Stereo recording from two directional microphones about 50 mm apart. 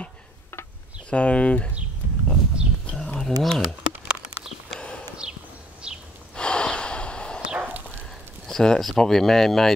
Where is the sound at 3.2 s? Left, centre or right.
Centre.